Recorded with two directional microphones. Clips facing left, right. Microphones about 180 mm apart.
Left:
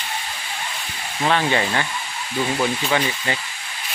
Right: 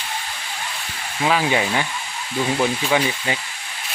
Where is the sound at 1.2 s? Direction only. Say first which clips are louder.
Even; 5° right (ahead or behind).